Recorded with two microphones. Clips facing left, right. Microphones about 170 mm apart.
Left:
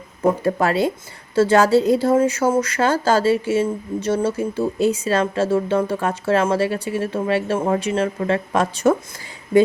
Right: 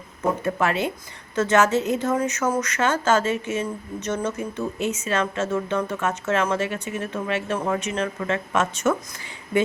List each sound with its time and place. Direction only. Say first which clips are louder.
0.2 s speech: left 5 dB; 35° left (ahead or behind)